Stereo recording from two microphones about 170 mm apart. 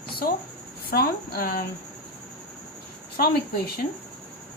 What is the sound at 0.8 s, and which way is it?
Speech, 60° left (ahead or behind).